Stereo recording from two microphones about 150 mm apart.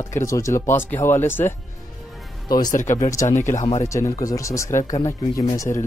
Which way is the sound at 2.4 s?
25° left (ahead or behind).